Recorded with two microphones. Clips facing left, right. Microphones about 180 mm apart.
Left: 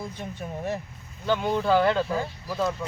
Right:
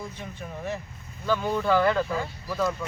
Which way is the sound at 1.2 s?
20° left (ahead or behind).